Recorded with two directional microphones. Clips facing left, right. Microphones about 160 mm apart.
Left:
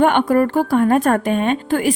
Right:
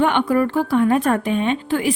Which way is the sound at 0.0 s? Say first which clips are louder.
Left 3 dB; 45° left (ahead or behind).